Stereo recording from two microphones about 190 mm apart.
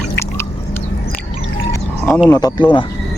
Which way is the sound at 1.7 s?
10° left (ahead or behind).